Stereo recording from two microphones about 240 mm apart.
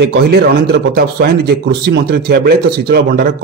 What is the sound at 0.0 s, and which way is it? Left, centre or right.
Speech, right.